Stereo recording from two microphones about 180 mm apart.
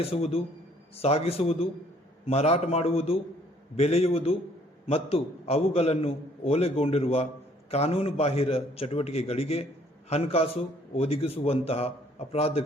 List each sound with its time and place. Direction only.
0.0 s a man's voice: 35° left (ahead or behind)